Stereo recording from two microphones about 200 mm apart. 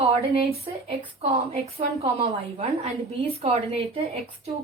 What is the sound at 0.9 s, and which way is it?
Speech, 30° right (ahead or behind).